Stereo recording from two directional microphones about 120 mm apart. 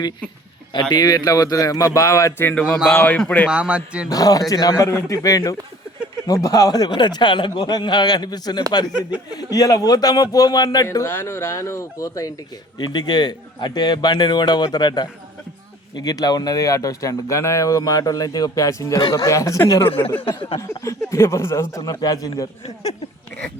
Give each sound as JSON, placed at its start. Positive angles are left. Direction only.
{"t": 0.7, "sound": "speech", "side_deg": 40}
{"t": 3.5, "sound": "a man's voice", "side_deg": -10}
{"t": 4.1, "sound": "a man's voice", "side_deg": 30}
{"t": 8.9, "sound": "a man's voice", "side_deg": -10}
{"t": 9.3, "sound": "a man's voice", "side_deg": 30}
{"t": 20.0, "sound": "speech", "side_deg": 15}
{"t": 20.2, "sound": "a sound", "side_deg": 50}
{"t": 20.6, "sound": "speech", "side_deg": 25}
{"t": 22.6, "sound": "speech", "side_deg": 60}